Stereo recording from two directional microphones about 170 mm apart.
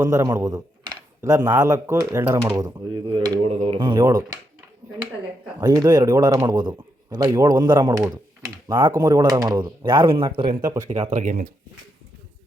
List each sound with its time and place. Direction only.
0.0 s speech: 20° right (ahead or behind)
5.5 s speech: 20° right (ahead or behind)
11.1 s speech: 50° right (ahead or behind)